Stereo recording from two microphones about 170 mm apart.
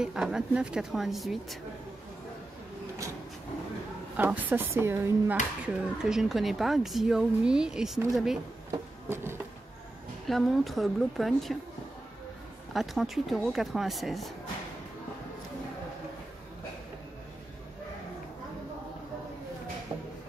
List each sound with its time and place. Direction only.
0.0 s speech: 5° right (ahead or behind)
4.2 s speech: 10° right (ahead or behind)
9.1 s a sound: 15° right (ahead or behind)
10.2 s speech: centre (ahead or behind)
12.7 s speech: centre (ahead or behind)
19.9 s a sound: 25° right (ahead or behind)